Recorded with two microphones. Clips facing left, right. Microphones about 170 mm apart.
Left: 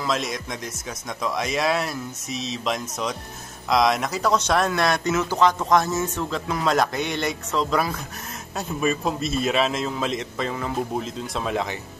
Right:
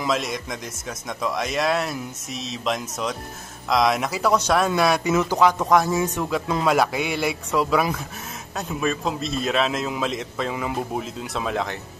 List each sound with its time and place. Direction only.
0.1 s a man's voice: centre (ahead or behind)
8.5 s a man's voice: 5° left (ahead or behind)